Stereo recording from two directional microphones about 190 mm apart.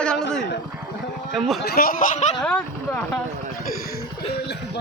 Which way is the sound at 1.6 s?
55° left (ahead or behind).